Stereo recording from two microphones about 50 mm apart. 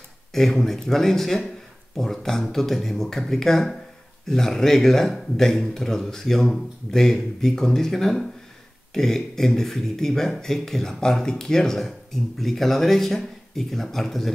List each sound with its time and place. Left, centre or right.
0.3 s speech: centre